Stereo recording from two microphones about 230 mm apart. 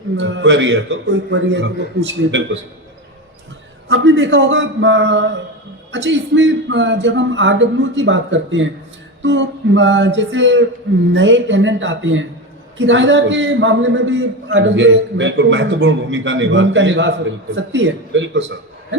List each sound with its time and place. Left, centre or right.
0.2 s a man's voice: right
3.8 s a man's voice: right